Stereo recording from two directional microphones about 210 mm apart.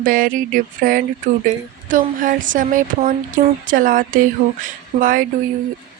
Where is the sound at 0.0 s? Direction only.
40° right (ahead or behind).